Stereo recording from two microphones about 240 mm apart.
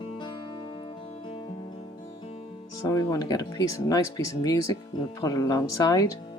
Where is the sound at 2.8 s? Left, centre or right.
Centre.